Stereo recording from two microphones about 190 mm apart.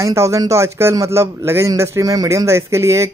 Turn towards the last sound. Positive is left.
turn(degrees=-15)  # may be behind; listen again after turning